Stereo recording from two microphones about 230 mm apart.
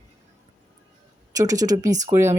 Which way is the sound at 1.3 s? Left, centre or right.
Centre.